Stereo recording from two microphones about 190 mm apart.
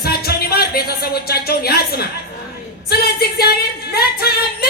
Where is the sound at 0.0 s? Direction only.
55° left (ahead or behind).